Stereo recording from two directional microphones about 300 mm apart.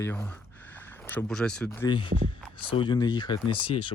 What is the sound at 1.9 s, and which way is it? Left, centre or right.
Speech, centre.